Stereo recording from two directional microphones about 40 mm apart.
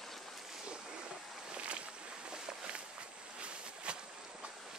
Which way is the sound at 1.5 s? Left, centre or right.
Right.